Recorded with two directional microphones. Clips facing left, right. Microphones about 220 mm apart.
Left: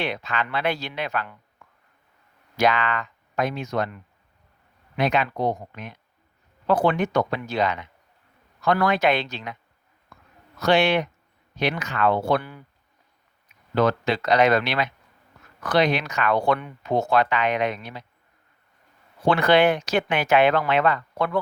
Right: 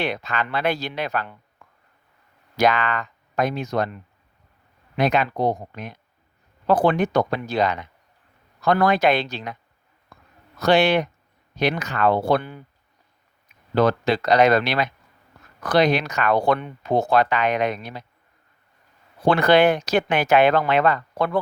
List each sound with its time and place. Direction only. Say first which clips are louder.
0.0 s speech: right 2 dB; 40° right (ahead or behind)
2.6 s speech: right 2 dB; 40° right (ahead or behind)
10.1 s a sound: right 1 dB; 35° right (ahead or behind)
10.6 s speech: right 2 dB; 35° right (ahead or behind)
12.4 s speech: right 3 dB; 25° right (ahead or behind)
13.7 s speech: right 2 dB; 35° right (ahead or behind)
19.2 s speech: right 2 dB; 40° right (ahead or behind)